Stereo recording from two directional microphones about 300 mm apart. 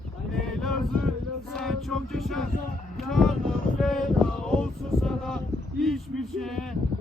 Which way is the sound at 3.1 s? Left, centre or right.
Centre.